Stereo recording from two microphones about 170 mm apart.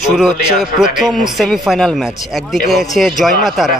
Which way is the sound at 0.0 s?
5° right (ahead or behind).